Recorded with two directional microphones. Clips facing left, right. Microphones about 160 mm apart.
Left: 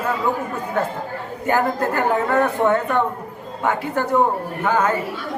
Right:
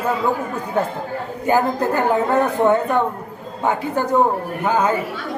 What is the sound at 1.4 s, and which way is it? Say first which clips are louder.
Speech: right 2 dB; 15° right (ahead or behind).